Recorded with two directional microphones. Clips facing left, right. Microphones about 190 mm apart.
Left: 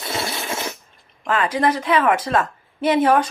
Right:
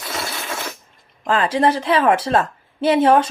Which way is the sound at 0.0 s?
25° left (ahead or behind).